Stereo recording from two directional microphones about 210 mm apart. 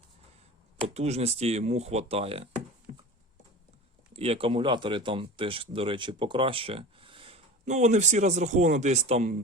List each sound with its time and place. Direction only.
0.9 s speech: 30° right (ahead or behind)
4.2 s speech: 25° right (ahead or behind)